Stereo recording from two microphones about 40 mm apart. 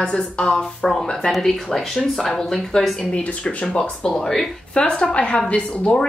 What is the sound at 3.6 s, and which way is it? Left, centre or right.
Speech, left.